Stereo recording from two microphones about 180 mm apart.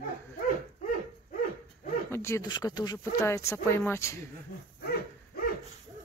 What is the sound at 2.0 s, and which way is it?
Speech, 15° left (ahead or behind).